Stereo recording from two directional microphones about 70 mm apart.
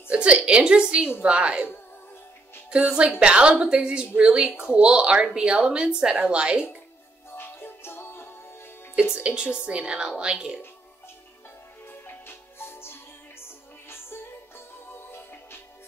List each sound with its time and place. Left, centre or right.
0.1 s speech: centre
2.7 s speech: centre
7.3 s music: left
9.1 s speech: centre
11.9 s music: left
15.0 s music: left